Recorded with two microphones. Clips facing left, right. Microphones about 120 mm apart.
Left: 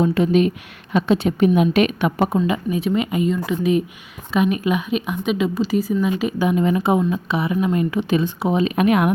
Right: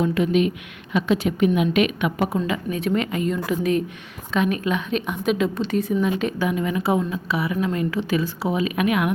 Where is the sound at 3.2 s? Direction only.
Centre (ahead or behind).